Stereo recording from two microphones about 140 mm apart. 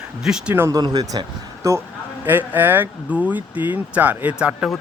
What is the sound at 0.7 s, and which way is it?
Speech, 30° right (ahead or behind).